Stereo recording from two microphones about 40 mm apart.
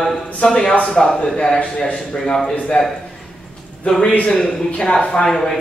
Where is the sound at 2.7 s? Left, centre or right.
Left.